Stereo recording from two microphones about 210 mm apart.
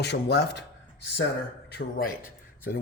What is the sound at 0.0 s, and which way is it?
Speech, 50° left (ahead or behind).